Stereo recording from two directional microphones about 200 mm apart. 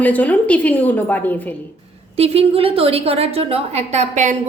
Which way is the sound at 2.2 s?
30° right (ahead or behind).